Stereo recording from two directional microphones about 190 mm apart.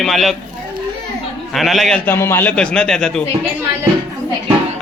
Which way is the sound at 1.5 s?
Centre (ahead or behind).